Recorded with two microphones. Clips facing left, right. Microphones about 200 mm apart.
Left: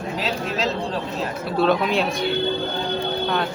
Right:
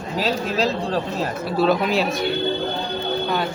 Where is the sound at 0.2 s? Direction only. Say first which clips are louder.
Right 5 dB; 40° right (ahead or behind).